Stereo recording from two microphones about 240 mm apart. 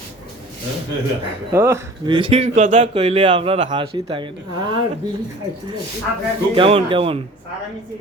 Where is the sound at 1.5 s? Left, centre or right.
Centre.